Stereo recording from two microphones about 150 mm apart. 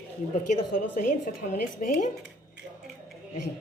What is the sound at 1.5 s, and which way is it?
Speech, 70° left (ahead or behind).